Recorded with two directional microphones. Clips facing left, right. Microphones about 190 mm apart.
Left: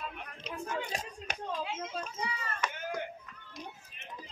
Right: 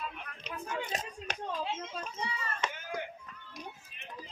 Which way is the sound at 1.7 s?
30° right (ahead or behind).